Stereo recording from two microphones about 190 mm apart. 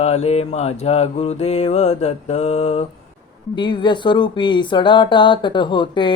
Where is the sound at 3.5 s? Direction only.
25° left (ahead or behind).